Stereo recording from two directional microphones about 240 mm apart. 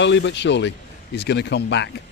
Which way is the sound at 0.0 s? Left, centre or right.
Left.